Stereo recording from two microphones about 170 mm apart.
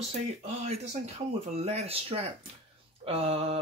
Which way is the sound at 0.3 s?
40° right (ahead or behind).